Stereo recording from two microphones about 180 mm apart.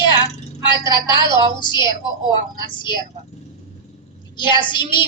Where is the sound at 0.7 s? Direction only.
25° left (ahead or behind).